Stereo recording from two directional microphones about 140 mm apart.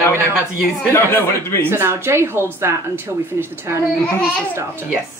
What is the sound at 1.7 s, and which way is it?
Speech, 15° right (ahead or behind).